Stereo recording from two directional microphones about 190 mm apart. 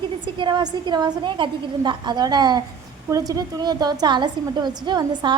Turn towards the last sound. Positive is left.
turn(degrees=-20)  # may be behind; listen again after turning